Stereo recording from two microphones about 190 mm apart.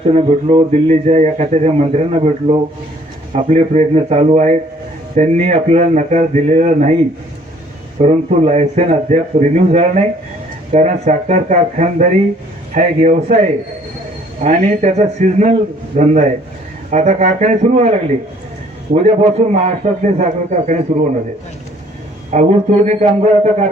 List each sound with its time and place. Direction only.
0.0 s speech: 30° right (ahead or behind)
8.0 s speech: 35° right (ahead or behind)
14.4 s speech: 40° right (ahead or behind)
19.0 s speech: 35° right (ahead or behind)
22.3 s speech: 35° right (ahead or behind)